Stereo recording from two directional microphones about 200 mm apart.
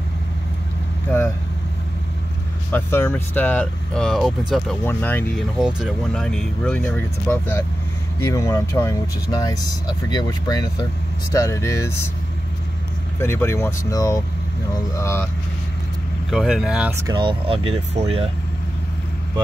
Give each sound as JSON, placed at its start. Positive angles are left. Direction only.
{"t": 2.7, "sound": "speech", "side_deg": 10}
{"t": 13.2, "sound": "speech", "side_deg": 10}
{"t": 16.3, "sound": "speech", "side_deg": 0}
{"t": 17.0, "sound": "speech", "side_deg": -20}